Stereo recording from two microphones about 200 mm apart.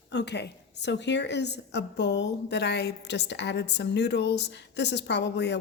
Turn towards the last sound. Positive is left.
turn(degrees=60)  # may be behind; listen again after turning